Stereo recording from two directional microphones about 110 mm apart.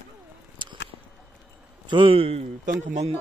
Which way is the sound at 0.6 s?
45° right (ahead or behind).